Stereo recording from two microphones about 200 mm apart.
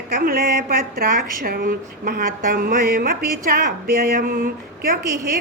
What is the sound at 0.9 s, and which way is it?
A woman's voice, 45° right (ahead or behind).